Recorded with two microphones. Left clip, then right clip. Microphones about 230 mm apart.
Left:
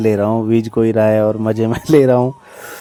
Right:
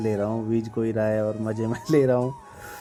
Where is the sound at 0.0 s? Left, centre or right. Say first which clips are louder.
Left 11 dB; left.